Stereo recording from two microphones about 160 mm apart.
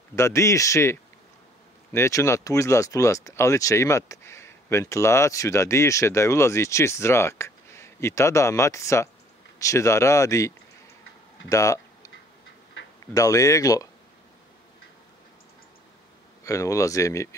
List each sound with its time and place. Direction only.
0.1 s speech: 20° left (ahead or behind)
16.4 s speech: 20° left (ahead or behind)